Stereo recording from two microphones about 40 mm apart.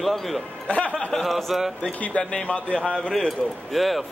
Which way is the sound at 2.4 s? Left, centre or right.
Left.